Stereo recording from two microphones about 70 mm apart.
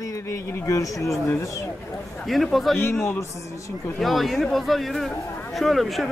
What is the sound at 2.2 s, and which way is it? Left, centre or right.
Speech, centre.